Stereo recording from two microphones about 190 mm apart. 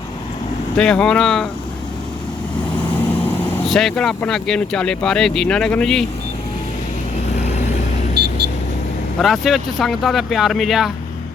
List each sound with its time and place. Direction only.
0.8 s speech: 5° left (ahead or behind)
3.2 s speech: centre (ahead or behind)
8.2 s vehicle: 60° right (ahead or behind)
9.2 s speech: centre (ahead or behind)